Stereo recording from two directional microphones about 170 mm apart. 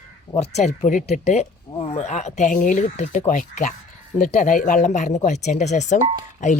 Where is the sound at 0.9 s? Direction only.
50° left (ahead or behind).